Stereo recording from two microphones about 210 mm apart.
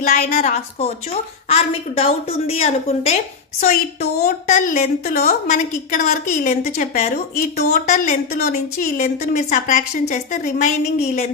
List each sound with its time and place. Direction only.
0.3 s a woman's voice: 35° left (ahead or behind)